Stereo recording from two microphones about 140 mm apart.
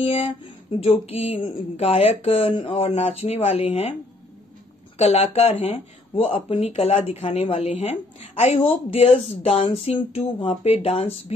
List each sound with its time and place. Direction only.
0.0 s speech: 45° left (ahead or behind)
4.9 s speech: 45° left (ahead or behind)